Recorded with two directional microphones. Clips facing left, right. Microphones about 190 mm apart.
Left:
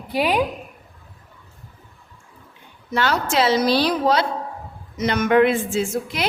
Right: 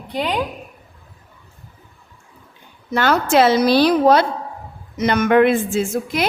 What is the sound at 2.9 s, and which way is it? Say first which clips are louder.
A woman's voice: right 5 dB; 50° right (ahead or behind).